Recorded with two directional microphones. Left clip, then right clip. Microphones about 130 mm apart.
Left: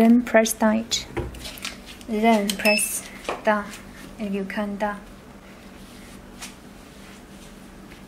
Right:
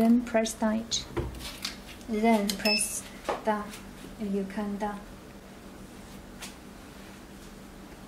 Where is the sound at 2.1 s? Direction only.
20° left (ahead or behind).